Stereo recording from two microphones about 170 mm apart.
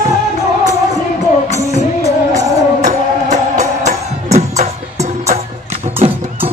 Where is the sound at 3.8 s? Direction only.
40° right (ahead or behind).